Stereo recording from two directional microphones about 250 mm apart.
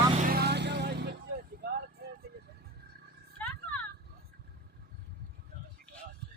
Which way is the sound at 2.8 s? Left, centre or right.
Right.